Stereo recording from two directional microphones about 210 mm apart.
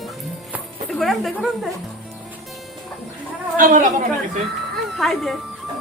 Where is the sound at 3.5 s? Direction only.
40° right (ahead or behind).